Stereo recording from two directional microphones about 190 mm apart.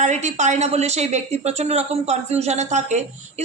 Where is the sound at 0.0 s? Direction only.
40° right (ahead or behind).